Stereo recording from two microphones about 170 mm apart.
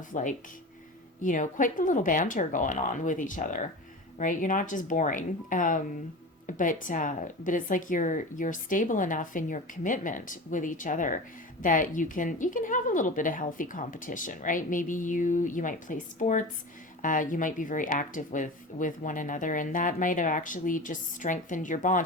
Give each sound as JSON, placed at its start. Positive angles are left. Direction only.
{"t": 0.1, "sound": "speech", "side_deg": 50}